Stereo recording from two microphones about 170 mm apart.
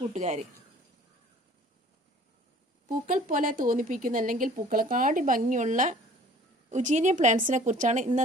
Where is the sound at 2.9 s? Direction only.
55° right (ahead or behind).